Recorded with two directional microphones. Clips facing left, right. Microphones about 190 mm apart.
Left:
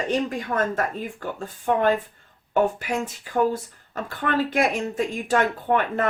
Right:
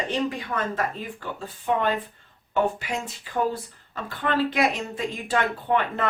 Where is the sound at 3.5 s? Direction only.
45° left (ahead or behind).